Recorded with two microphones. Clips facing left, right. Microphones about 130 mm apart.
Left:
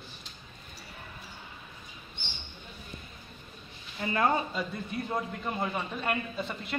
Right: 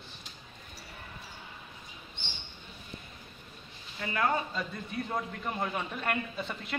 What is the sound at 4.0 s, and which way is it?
Speech, 30° left (ahead or behind).